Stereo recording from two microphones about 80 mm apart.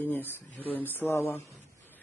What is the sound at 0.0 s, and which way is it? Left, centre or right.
Speech, left.